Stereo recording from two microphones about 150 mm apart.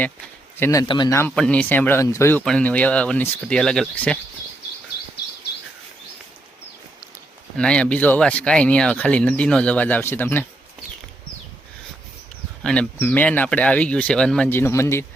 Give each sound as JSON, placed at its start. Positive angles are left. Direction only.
{"t": 0.5, "sound": "speech", "side_deg": 20}
{"t": 0.9, "sound": "a man's voice", "side_deg": 30}
{"t": 1.4, "sound": "speech", "side_deg": 10}
{"t": 2.4, "sound": "speech", "side_deg": 5}
{"t": 7.5, "sound": "speech", "side_deg": 5}
{"t": 12.6, "sound": "speech", "side_deg": 5}
{"t": 14.5, "sound": "speech", "side_deg": 15}